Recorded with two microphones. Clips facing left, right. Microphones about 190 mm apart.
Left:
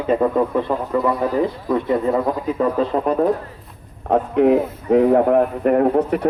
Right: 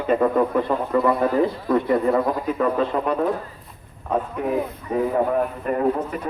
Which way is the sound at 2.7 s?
35° left (ahead or behind).